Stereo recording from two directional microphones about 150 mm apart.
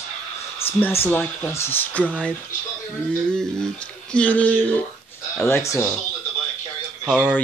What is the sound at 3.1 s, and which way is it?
Speech, 5° left (ahead or behind).